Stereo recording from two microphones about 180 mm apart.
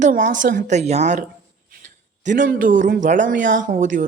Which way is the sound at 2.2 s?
45° right (ahead or behind).